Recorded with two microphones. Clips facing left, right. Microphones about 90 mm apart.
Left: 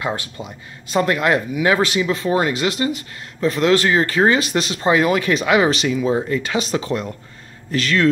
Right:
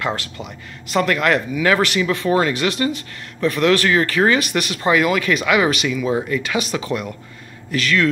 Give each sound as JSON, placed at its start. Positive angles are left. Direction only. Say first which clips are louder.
{"t": 0.0, "sound": "speech", "louder": "even", "side_deg": 20}